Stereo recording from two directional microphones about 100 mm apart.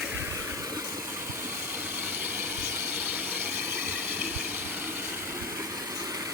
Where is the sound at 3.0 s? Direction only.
20° right (ahead or behind).